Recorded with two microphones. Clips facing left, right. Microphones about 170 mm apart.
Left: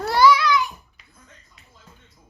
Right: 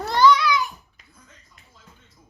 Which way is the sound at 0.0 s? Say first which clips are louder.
Left 1 dB; 10° left (ahead or behind).